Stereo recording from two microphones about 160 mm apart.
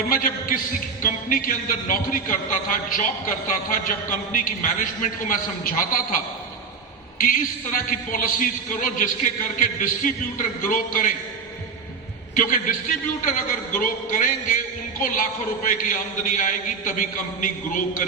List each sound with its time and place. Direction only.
0.1 s a man's voice: 60° left (ahead or behind)
12.3 s a man's voice: 55° left (ahead or behind)
13.7 s a man's voice: 55° left (ahead or behind)